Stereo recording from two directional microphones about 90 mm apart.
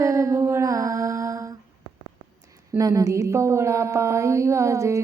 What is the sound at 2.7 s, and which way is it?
Speech, 35° right (ahead or behind).